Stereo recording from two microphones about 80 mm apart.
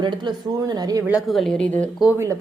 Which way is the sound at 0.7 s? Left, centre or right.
Right.